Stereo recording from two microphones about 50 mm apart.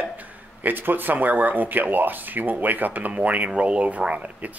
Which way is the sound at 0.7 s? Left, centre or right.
Right.